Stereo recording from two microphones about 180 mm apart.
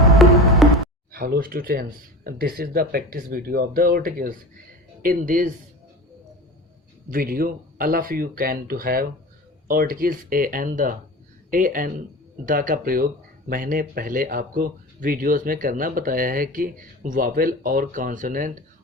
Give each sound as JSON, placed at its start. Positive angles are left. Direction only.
{"t": 0.0, "sound": "music", "side_deg": 0}
{"t": 1.1, "sound": "speech", "side_deg": -55}
{"t": 7.1, "sound": "speech", "side_deg": -55}